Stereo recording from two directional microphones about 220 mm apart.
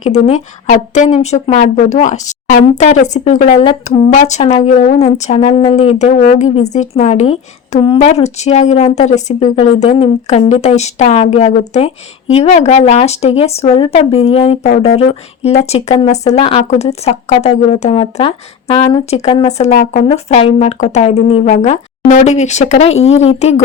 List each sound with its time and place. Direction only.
0.0 s a woman's voice: 30° left (ahead or behind)